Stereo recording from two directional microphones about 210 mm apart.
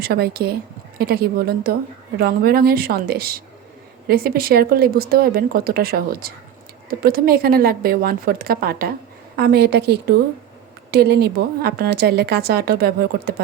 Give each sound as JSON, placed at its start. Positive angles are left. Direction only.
{"t": 0.0, "sound": "a woman's voice", "side_deg": -50}